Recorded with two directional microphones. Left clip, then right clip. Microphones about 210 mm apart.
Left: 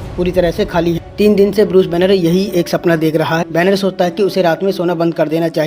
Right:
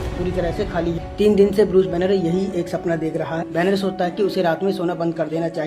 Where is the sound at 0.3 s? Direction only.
40° left (ahead or behind).